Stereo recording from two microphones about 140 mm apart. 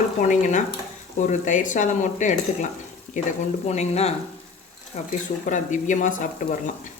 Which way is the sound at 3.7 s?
50° left (ahead or behind).